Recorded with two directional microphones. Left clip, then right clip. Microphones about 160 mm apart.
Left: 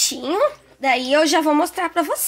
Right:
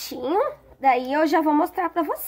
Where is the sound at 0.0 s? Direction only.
50° left (ahead or behind).